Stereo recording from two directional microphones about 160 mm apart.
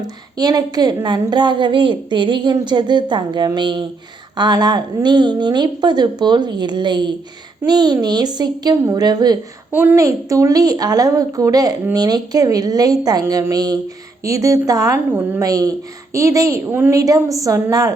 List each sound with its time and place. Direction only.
0.0 s a woman's voice: 25° right (ahead or behind)